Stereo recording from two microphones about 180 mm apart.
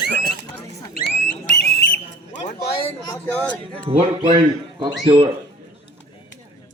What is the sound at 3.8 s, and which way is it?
Speech, 25° right (ahead or behind).